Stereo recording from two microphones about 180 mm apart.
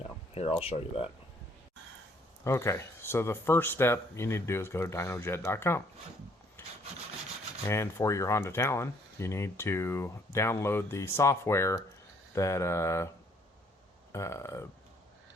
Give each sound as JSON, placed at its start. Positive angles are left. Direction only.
{"t": 0.0, "sound": "speech", "side_deg": 35}
{"t": 2.4, "sound": "speech", "side_deg": 15}
{"t": 6.6, "sound": "rub", "side_deg": 10}
{"t": 7.7, "sound": "speech", "side_deg": 15}
{"t": 14.1, "sound": "speech", "side_deg": 15}